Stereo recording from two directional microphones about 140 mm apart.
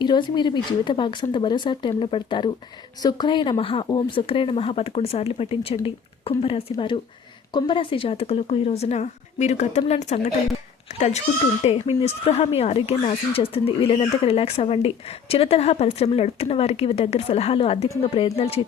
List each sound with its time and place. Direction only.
0.0 s speech: 35° left (ahead or behind)